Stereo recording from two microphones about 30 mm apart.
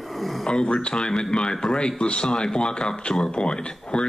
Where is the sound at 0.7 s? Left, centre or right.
Left.